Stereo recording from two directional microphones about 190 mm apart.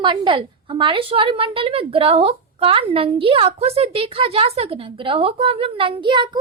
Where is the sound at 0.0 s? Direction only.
25° right (ahead or behind).